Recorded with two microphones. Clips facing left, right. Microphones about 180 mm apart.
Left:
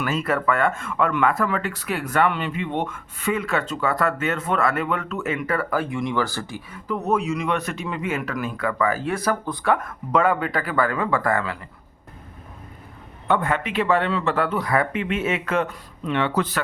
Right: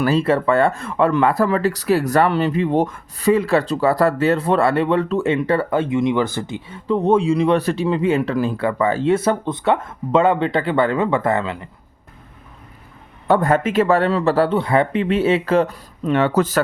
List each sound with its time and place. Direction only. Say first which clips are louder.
0.0 s speech: right 6 dB; 30° right (ahead or behind)
13.2 s speech: right 6 dB; 40° right (ahead or behind)